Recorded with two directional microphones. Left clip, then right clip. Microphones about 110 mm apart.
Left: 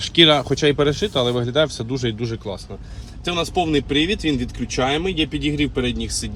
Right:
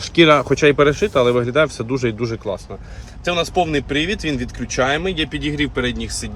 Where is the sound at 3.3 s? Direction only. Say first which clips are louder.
Right 3 dB; 15° right (ahead or behind).